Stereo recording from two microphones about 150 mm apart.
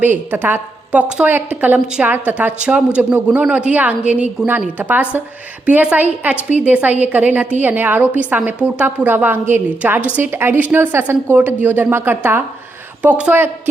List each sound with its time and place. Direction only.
0.0 s a woman's voice: 15° right (ahead or behind)